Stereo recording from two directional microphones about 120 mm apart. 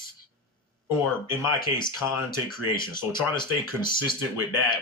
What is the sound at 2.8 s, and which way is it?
Speech, 40° left (ahead or behind).